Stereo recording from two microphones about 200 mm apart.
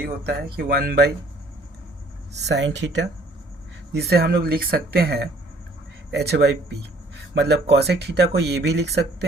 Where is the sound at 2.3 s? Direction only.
60° right (ahead or behind).